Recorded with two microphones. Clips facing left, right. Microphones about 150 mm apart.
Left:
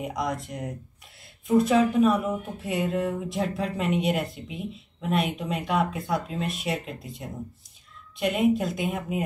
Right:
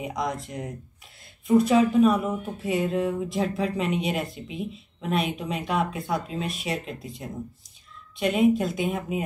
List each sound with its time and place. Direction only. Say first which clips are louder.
0.0 s speech: even; centre (ahead or behind)